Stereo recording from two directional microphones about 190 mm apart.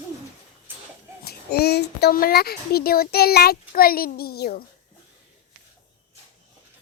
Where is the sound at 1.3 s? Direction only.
55° left (ahead or behind).